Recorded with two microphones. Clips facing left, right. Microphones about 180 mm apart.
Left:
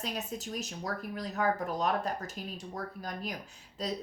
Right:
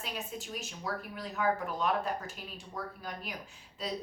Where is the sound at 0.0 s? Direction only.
40° left (ahead or behind).